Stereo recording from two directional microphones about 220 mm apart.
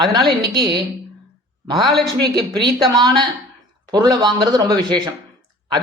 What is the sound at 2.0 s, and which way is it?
A woman's voice, 20° right (ahead or behind).